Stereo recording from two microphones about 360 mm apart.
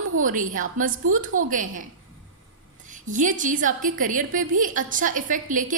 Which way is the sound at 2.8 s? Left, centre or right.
Right.